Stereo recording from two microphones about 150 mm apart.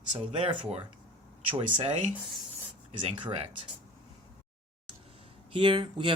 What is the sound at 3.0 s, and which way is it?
Speech, 35° right (ahead or behind).